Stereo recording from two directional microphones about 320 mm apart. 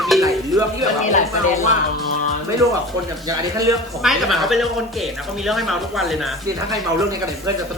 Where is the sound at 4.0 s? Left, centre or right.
Centre.